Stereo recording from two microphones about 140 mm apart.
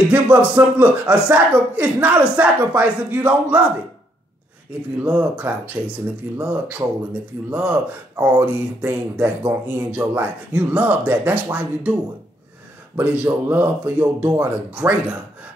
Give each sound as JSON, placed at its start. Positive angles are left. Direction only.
{"t": 0.1, "sound": "speech", "side_deg": -10}
{"t": 5.0, "sound": "speech", "side_deg": -10}
{"t": 12.9, "sound": "speech", "side_deg": -10}